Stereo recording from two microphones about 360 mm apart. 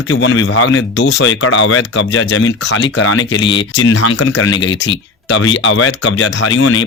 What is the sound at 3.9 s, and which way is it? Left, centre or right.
Speech, left.